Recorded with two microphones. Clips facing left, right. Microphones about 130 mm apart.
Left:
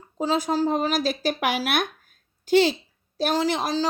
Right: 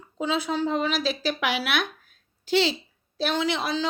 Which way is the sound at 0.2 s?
40° left (ahead or behind).